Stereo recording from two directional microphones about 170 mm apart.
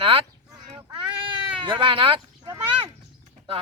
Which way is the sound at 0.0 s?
35° right (ahead or behind).